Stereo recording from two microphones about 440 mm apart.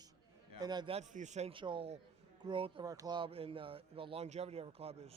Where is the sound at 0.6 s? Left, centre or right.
Centre.